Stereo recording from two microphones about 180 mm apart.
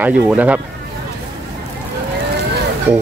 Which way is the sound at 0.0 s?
10° right (ahead or behind).